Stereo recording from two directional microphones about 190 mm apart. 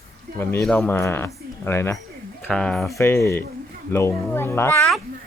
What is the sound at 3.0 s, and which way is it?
Speech, 15° left (ahead or behind).